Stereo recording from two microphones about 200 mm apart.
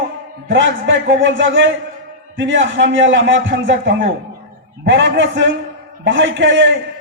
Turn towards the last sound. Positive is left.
turn(degrees=-65)  # may be behind; listen again after turning